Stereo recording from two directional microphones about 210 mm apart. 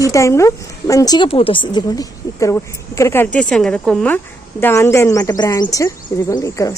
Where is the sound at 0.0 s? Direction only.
15° left (ahead or behind).